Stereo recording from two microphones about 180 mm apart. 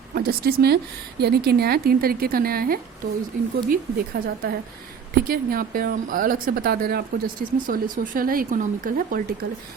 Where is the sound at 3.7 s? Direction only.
60° right (ahead or behind).